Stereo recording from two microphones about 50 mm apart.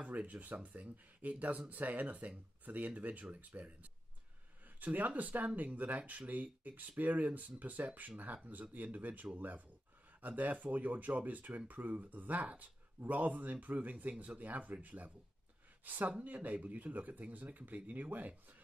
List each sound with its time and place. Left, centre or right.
0.0 s speech: right